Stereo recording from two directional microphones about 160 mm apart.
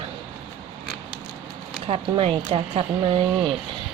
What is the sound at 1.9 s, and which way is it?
Speech, 35° right (ahead or behind).